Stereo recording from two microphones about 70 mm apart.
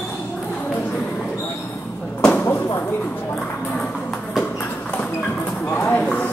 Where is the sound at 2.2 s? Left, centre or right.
Left.